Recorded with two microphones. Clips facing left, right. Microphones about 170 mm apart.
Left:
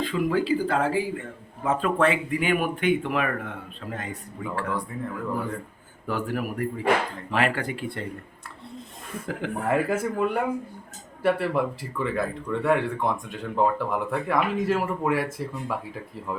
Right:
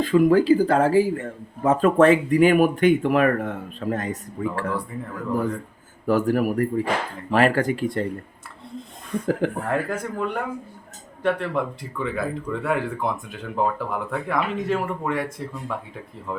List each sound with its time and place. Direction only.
0.0 s speech: 45° right (ahead or behind)
6.1 s speech: 40° right (ahead or behind)
9.2 s speech: 40° right (ahead or behind)
9.6 s speech: 5° left (ahead or behind)